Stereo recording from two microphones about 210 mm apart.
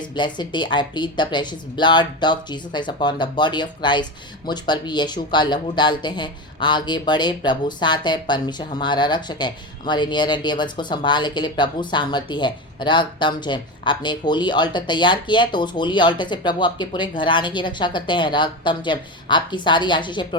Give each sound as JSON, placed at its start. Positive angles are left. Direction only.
{"t": 0.0, "sound": "speech", "side_deg": 20}